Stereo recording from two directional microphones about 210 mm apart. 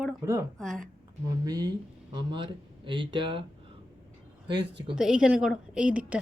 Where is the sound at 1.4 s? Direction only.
20° right (ahead or behind).